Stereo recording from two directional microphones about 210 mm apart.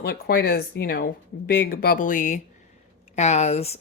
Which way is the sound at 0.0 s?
50° left (ahead or behind).